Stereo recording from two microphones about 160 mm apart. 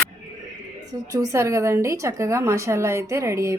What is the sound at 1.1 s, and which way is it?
A woman's voice, 20° right (ahead or behind).